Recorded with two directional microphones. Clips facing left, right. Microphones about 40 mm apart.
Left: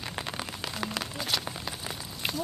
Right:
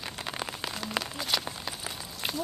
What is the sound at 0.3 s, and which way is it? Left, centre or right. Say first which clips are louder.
Rain on surface: right 1 dB; centre.